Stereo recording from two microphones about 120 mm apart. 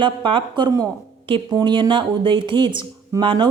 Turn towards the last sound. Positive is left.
turn(degrees=-40)  # may be behind; listen again after turning